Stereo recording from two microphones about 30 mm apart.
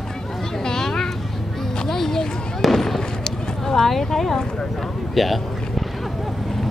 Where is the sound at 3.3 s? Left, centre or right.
Centre.